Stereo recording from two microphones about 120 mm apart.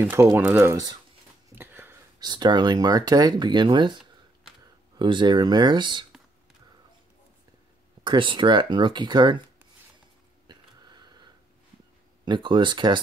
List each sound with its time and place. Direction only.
0.0 s speech: 20° right (ahead or behind)
0.4 s speech: 10° right (ahead or behind)
0.7 s speech: 30° right (ahead or behind)
1.5 s a sound: 20° right (ahead or behind)
2.1 s speech: 40° right (ahead or behind)
8.0 s speech: 45° right (ahead or behind)
10.4 s a sound: 35° right (ahead or behind)
12.3 s speech: 40° right (ahead or behind)